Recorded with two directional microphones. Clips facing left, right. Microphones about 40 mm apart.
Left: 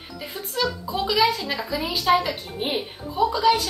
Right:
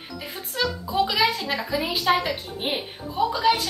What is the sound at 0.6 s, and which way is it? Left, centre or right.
Speech, centre.